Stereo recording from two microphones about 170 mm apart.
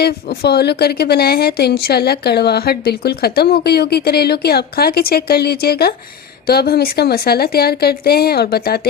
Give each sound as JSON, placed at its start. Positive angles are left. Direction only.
{"t": 0.0, "sound": "a woman's voice", "side_deg": 70}